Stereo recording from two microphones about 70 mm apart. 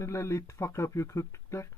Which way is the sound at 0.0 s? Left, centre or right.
Left.